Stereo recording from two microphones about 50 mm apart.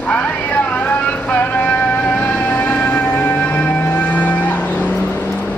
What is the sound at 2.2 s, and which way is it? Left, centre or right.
Music, left.